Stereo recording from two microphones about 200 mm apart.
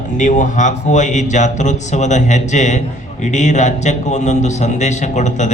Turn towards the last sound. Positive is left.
turn(degrees=35)  # may be behind; listen again after turning